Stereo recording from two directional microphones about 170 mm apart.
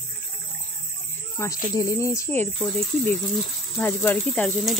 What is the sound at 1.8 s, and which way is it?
Speech, 20° left (ahead or behind).